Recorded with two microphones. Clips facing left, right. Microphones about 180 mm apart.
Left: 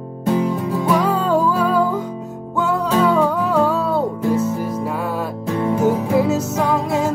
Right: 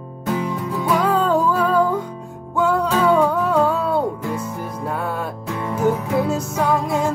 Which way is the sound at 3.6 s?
5° left (ahead or behind).